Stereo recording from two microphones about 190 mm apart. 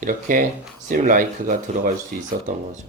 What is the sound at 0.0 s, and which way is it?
Speech, 45° right (ahead or behind).